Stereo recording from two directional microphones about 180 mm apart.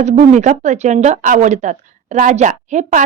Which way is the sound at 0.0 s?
40° right (ahead or behind).